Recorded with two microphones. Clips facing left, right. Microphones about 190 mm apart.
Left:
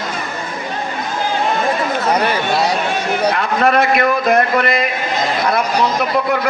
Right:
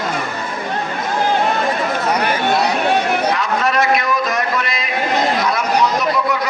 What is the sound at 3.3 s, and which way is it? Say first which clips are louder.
A man's voice: left 3 dB; 55° left (ahead or behind).